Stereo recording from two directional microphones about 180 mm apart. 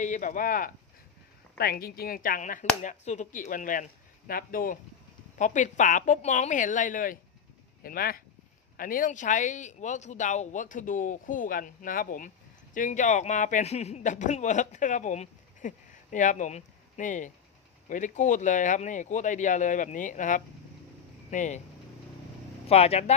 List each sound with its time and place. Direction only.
0.0 s speech: 45° left (ahead or behind)
22.6 s speech: 35° left (ahead or behind)